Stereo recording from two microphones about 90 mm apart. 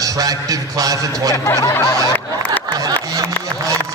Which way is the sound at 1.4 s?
40° left (ahead or behind).